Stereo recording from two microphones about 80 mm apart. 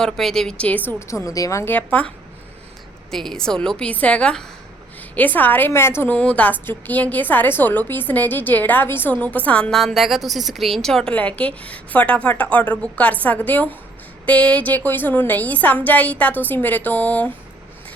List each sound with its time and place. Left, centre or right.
0.0 s a woman's voice: centre
0.9 s a woman's voice: left
1.6 s a woman's voice: left
3.1 s a woman's voice: centre; by 6.1 s left
6.1 s a woman's voice: centre
9.7 s speech: centre
11.1 s a woman's voice: centre